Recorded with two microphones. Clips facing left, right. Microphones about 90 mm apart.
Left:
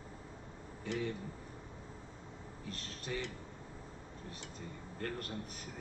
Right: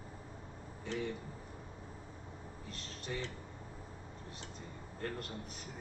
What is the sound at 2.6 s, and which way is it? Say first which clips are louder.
Speech: left 2 dB; 50° left (ahead or behind).